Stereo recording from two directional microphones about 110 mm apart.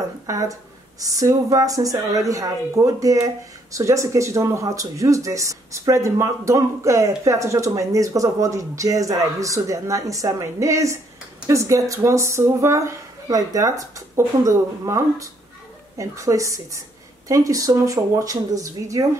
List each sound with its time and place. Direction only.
0.3 s speech: 30° right (ahead or behind)